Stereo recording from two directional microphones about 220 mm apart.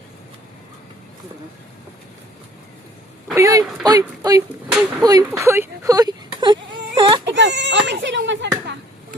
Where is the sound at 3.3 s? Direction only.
15° right (ahead or behind).